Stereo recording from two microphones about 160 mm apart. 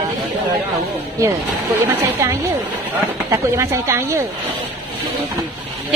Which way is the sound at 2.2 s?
20° right (ahead or behind).